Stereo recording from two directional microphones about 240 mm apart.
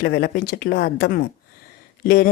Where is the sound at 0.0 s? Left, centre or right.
Left.